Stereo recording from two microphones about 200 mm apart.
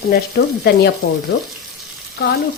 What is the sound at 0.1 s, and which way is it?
Speech, 55° left (ahead or behind).